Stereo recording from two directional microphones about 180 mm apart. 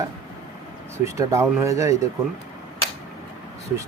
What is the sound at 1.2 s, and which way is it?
Speech, 15° right (ahead or behind).